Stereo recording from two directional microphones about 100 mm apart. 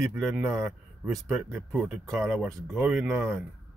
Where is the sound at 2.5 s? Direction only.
5° left (ahead or behind).